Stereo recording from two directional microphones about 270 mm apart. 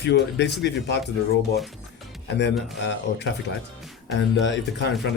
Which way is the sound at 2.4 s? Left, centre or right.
Left.